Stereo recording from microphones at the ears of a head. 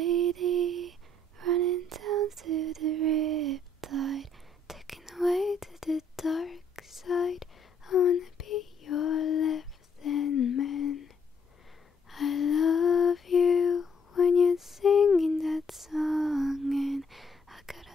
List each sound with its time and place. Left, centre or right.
0.0 s lullaby: right
4.6 s whispering: centre
6.7 s whispering: left
12.1 s lullaby: left
15.2 s lullaby: centre